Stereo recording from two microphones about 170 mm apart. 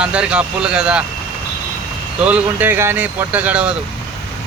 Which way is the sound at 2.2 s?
10° right (ahead or behind).